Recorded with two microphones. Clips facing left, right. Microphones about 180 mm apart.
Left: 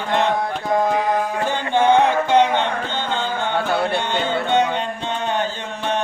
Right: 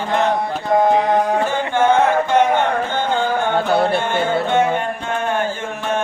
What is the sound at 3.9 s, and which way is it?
Music, 20° left (ahead or behind).